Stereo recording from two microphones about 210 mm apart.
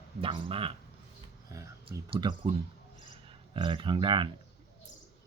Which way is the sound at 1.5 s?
15° right (ahead or behind).